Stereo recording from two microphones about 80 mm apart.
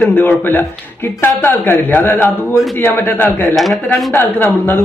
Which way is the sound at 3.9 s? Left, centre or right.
Left.